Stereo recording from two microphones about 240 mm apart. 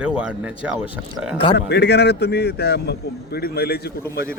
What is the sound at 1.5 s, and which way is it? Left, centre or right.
Speech, left.